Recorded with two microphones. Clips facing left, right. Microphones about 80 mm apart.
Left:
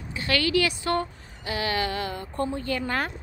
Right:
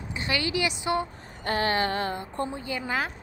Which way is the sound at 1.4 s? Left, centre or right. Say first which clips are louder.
Right 2 dB; right.